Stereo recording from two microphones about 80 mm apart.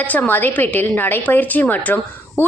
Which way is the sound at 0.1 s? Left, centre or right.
Left.